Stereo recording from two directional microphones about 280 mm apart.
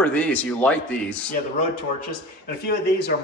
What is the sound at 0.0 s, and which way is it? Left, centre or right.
Speech, centre.